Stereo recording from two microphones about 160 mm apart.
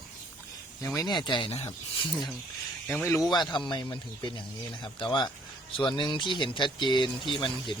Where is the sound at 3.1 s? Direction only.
25° left (ahead or behind).